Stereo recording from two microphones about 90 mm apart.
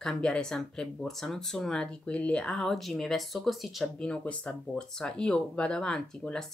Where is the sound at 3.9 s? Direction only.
10° left (ahead or behind).